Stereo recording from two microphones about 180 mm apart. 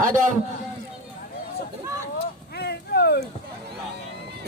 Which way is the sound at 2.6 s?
65° left (ahead or behind).